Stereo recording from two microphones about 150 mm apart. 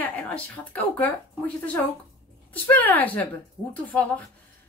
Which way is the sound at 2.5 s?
10° left (ahead or behind).